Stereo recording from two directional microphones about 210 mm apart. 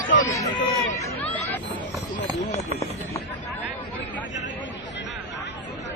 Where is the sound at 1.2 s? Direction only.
5° left (ahead or behind).